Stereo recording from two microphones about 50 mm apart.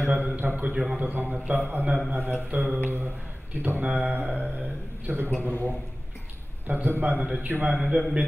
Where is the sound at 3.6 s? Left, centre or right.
Right.